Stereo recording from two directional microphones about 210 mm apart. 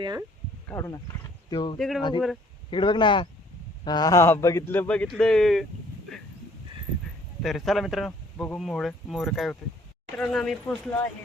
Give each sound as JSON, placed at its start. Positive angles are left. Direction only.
{"t": 0.0, "sound": "speech", "side_deg": -15}
{"t": 0.7, "sound": "speech", "side_deg": 15}
{"t": 7.4, "sound": "speech", "side_deg": 0}